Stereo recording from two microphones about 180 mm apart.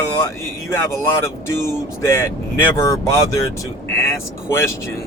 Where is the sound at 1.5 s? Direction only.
15° left (ahead or behind).